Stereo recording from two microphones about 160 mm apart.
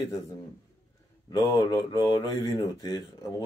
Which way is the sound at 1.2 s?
25° left (ahead or behind).